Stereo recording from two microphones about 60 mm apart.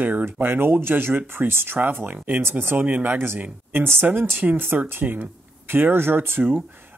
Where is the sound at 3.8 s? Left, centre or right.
Right.